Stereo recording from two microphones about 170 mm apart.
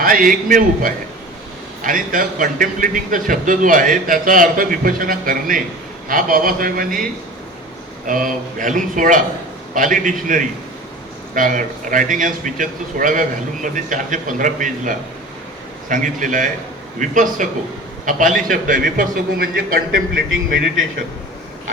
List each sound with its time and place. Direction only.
0.0 s a man's voice: 55° right (ahead or behind)